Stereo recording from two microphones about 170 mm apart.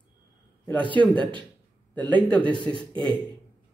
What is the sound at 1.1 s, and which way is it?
Speech, 30° right (ahead or behind).